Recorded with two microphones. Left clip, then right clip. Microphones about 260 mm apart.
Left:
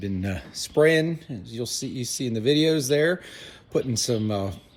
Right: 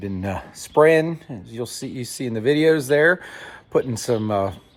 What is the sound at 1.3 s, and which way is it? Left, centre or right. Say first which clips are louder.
Speech: right 2 dB; right.